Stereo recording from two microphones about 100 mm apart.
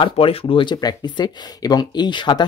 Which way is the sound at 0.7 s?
45° left (ahead or behind).